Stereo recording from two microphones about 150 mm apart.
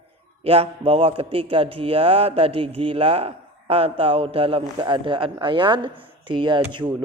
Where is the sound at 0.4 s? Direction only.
40° right (ahead or behind).